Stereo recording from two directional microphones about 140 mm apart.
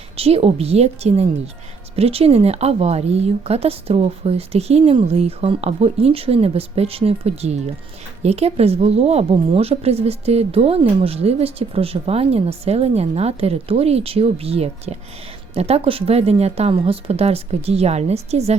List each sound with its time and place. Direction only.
0.2 s a woman's voice: 45° right (ahead or behind)